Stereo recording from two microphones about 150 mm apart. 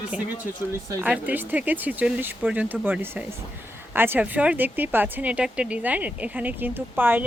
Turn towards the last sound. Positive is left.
turn(degrees=-15)  # may be behind; listen again after turning